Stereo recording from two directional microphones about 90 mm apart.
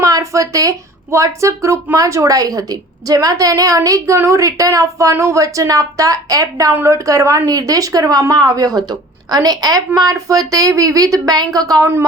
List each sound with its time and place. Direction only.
0.0 s a woman's voice: 40° right (ahead or behind)